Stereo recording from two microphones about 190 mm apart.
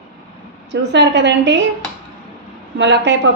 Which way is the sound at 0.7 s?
65° right (ahead or behind).